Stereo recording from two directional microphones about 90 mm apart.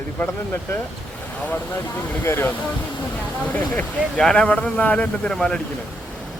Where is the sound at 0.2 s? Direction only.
20° left (ahead or behind).